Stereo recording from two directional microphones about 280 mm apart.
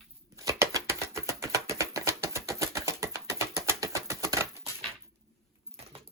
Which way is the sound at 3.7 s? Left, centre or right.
Centre.